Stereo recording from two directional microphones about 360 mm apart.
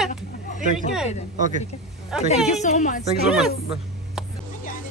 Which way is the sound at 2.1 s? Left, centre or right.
Centre.